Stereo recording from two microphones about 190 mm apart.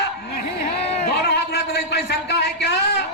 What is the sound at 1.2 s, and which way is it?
A man's voice, 60° left (ahead or behind).